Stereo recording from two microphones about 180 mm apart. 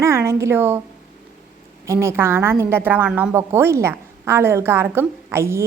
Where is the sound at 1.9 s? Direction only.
15° right (ahead or behind).